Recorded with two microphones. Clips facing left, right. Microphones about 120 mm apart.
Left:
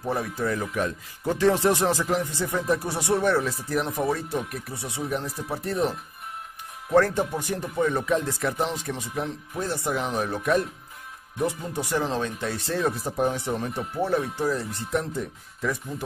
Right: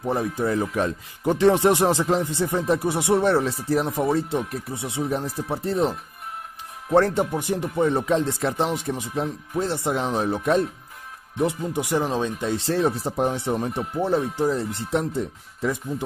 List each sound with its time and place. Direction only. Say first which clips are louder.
0.0 s speech: right 3 dB; 20° right (ahead or behind)
14.5 s speech: right 3 dB; 30° right (ahead or behind)